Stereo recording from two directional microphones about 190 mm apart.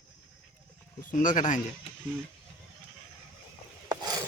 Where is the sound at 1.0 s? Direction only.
45° left (ahead or behind).